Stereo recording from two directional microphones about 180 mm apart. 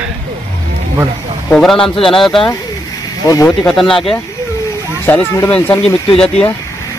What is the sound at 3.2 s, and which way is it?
Speech, 20° left (ahead or behind).